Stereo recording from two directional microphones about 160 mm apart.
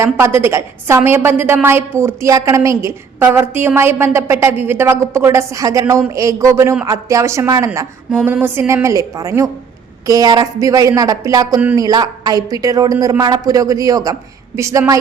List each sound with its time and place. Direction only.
0.0 s a woman's voice: 15° right (ahead or behind)